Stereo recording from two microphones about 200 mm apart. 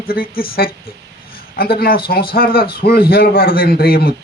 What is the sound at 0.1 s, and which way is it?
A man's voice, 45° left (ahead or behind).